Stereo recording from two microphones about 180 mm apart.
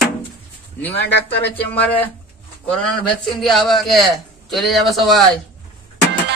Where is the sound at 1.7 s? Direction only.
10° left (ahead or behind).